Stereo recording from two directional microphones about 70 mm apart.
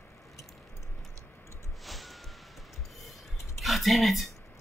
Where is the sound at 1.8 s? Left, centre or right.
Centre.